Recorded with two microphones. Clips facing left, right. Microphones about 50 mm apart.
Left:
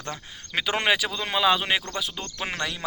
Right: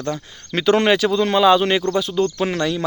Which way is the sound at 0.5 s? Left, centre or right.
Centre.